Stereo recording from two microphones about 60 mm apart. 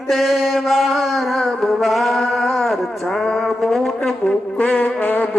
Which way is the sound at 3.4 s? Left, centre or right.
Centre.